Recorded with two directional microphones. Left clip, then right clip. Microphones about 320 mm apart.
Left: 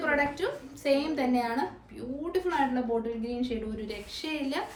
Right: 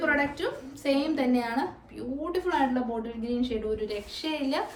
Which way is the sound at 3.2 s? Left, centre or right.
Centre.